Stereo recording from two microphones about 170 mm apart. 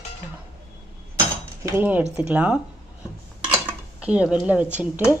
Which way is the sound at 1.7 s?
10° right (ahead or behind).